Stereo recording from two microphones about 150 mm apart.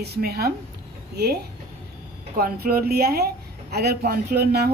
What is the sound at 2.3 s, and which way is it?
A woman's voice, 80° right.